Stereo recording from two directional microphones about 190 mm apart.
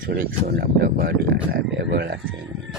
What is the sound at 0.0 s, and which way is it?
Speech, 50° right (ahead or behind).